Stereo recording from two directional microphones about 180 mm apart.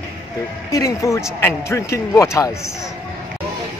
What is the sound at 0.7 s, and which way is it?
A man's voice, 15° left (ahead or behind).